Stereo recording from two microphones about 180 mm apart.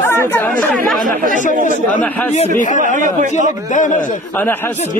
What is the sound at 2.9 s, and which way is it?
Speech, 45° right (ahead or behind).